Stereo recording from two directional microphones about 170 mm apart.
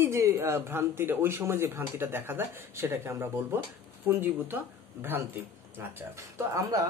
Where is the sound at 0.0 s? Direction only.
15° right (ahead or behind).